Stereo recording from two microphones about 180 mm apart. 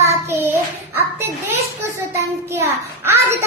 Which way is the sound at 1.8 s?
15° right (ahead or behind).